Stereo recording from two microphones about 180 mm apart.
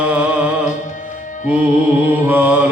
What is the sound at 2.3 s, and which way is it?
Mantra, 10° right (ahead or behind).